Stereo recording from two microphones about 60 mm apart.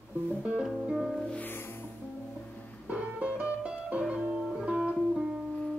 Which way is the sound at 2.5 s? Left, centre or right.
Left.